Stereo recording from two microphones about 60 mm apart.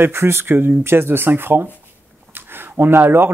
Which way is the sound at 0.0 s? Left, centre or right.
Right.